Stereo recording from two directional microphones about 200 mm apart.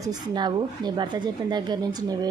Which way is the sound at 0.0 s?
20° right (ahead or behind).